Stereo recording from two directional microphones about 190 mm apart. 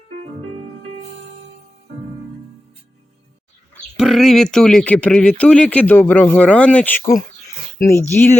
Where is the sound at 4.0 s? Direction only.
Centre (ahead or behind).